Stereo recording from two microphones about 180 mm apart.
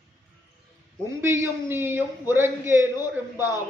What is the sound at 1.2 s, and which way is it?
A man's voice, 15° right (ahead or behind).